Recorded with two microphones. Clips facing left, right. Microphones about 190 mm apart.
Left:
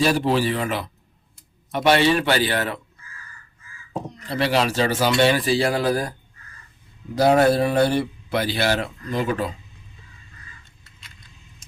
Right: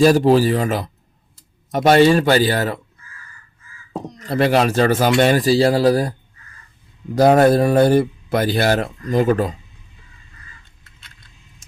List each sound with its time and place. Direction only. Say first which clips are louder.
0.0 s a man's voice: right 7 dB; 40° right (ahead or behind)
4.3 s speech: right 5 dB; 45° right (ahead or behind)
7.2 s speech: right 4 dB; 45° right (ahead or behind)